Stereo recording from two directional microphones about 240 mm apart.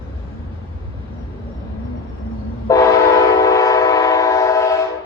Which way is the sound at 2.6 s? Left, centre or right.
Centre.